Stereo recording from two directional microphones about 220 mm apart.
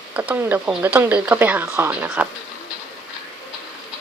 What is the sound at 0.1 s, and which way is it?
Speech, 10° right (ahead or behind).